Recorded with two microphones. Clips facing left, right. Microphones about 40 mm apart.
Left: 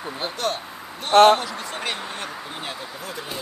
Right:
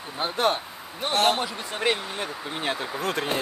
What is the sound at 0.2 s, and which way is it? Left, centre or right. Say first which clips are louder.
Speech: right 4 dB; right.